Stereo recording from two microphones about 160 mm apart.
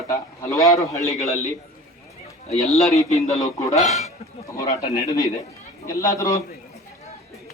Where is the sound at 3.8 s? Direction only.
45° left (ahead or behind).